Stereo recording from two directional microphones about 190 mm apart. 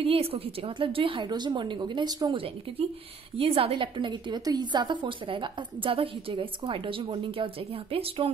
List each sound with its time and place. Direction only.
0.0 s a woman's voice: 30° right (ahead or behind)